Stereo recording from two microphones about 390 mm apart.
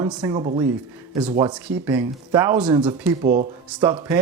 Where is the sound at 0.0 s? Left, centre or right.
Centre.